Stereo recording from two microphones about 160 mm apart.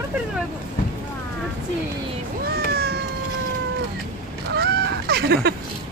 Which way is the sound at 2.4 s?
75° right (ahead or behind).